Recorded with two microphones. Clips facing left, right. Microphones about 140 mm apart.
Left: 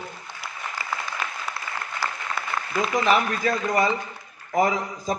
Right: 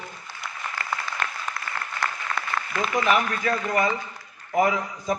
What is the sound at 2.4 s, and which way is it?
Applause, 5° left (ahead or behind).